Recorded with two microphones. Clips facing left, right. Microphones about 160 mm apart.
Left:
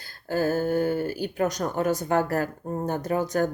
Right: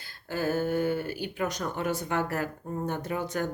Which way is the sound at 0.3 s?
40° left (ahead or behind).